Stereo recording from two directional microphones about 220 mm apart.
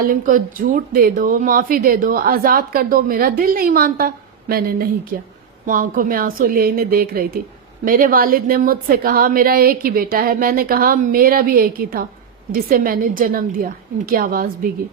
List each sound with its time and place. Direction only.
0.0 s a woman's voice: 40° right (ahead or behind)